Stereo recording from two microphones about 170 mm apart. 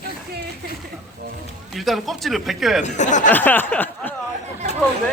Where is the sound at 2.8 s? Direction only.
45° left (ahead or behind).